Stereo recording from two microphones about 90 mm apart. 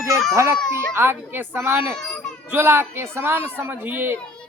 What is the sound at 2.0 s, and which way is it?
Baby cry, 5° left (ahead or behind).